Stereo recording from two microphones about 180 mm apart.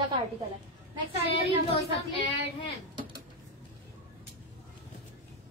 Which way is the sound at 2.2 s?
30° left (ahead or behind).